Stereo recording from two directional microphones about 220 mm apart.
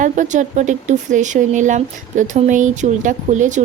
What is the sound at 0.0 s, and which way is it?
Speech, 35° right (ahead or behind).